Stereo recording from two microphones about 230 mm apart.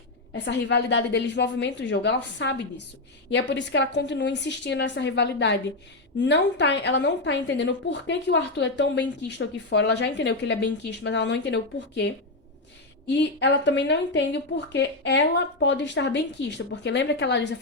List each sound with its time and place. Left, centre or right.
0.3 s a woman's voice: left